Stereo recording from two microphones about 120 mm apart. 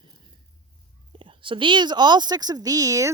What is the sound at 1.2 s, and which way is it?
Speech, 45° right (ahead or behind).